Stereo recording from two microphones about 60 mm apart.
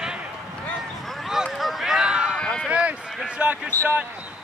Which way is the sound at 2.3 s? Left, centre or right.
Centre.